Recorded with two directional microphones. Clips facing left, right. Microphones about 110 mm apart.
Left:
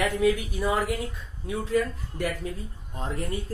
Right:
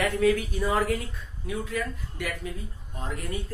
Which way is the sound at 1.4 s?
30° left (ahead or behind).